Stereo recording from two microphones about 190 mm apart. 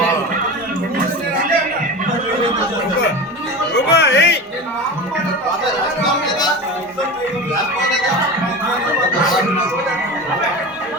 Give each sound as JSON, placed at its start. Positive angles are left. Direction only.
{"t": 3.8, "sound": "music", "side_deg": 60}